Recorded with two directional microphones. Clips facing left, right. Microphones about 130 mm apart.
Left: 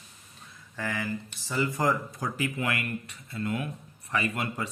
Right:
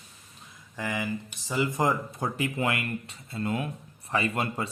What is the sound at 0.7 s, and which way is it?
Speech, 15° right (ahead or behind).